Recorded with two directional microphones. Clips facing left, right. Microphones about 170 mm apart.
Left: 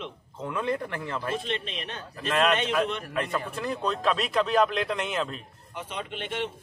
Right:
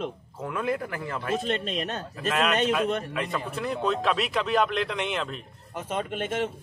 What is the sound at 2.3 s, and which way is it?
Speech, centre (ahead or behind).